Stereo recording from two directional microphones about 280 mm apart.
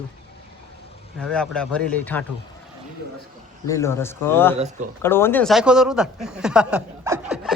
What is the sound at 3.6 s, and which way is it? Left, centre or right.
Speech, centre.